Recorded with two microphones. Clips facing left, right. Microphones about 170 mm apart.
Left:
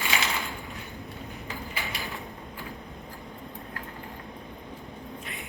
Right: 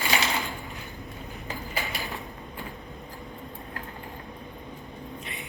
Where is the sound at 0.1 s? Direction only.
35° right (ahead or behind).